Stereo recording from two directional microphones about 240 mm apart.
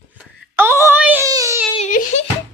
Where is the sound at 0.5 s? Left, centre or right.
Centre.